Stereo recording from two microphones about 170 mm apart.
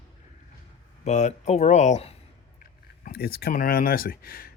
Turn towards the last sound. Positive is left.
turn(degrees=60)  # may be behind; listen again after turning